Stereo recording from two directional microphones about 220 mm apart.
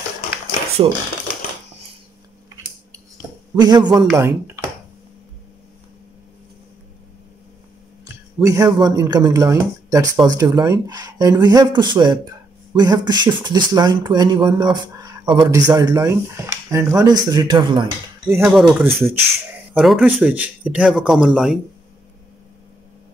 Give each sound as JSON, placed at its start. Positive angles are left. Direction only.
{"t": 3.5, "sound": "speech", "side_deg": -20}
{"t": 8.4, "sound": "speech", "side_deg": -15}